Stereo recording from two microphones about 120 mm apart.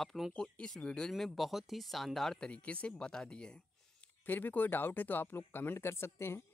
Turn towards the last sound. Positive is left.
turn(degrees=20)  # may be behind; listen again after turning